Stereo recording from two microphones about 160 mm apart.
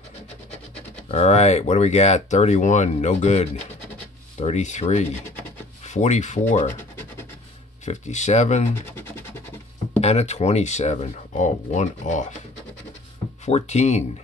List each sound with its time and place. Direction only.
1.1 s speech: 45° left (ahead or behind)
7.8 s speech: 45° left (ahead or behind)
9.9 s speech: 40° left (ahead or behind)
13.5 s speech: 40° left (ahead or behind)